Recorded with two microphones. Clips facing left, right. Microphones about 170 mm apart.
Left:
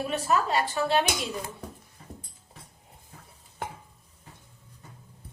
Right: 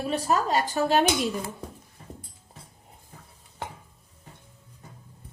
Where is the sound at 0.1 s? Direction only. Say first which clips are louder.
Right 3 dB; 40° right (ahead or behind).